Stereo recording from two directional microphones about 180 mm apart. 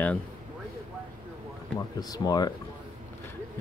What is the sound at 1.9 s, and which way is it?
Speech, 20° left (ahead or behind).